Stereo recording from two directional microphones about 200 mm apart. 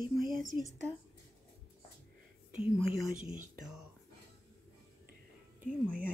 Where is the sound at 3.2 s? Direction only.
40° right (ahead or behind).